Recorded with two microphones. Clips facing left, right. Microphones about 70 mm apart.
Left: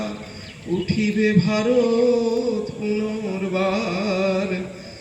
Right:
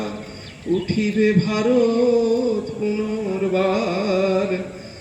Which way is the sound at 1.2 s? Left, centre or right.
Centre.